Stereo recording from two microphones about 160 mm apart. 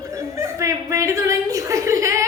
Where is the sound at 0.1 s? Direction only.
20° right (ahead or behind).